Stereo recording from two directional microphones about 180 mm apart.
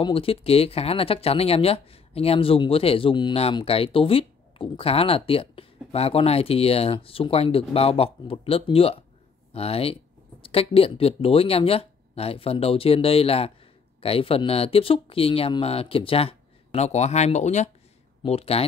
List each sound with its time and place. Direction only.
0.0 s speech: 30° left (ahead or behind)